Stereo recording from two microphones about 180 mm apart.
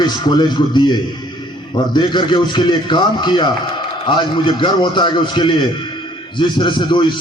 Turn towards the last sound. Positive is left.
turn(degrees=25)  # may be behind; listen again after turning